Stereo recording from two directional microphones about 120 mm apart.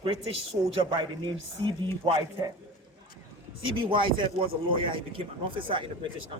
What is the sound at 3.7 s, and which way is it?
A man's voice, 45° right (ahead or behind).